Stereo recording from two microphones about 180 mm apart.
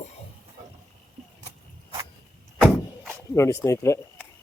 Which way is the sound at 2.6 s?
Centre (ahead or behind).